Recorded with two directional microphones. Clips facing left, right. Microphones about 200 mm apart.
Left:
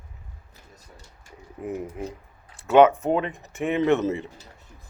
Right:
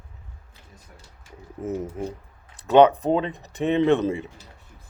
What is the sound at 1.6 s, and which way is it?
Speech, 5° left (ahead or behind).